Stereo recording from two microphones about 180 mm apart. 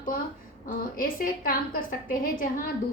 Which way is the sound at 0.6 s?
50° left (ahead or behind).